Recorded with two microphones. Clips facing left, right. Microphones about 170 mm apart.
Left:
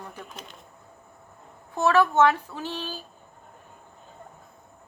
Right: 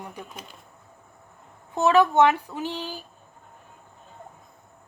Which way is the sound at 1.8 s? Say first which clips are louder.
Right 2 dB; 20° right (ahead or behind).